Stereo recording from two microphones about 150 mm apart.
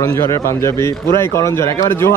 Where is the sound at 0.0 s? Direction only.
20° left (ahead or behind).